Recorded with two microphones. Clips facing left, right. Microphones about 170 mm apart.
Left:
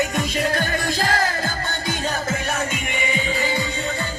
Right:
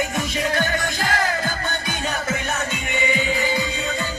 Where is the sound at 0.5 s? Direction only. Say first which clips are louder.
Even; 35° left (ahead or behind).